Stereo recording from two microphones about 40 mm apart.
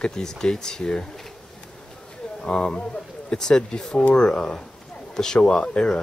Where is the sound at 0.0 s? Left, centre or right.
Centre.